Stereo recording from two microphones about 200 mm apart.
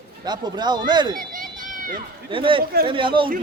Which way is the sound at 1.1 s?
40° right (ahead or behind).